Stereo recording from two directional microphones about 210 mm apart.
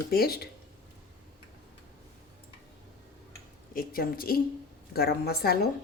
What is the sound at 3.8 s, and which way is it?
A woman's voice, 45° left (ahead or behind).